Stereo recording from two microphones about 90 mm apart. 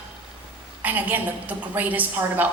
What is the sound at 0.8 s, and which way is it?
A man's voice, 20° right (ahead or behind).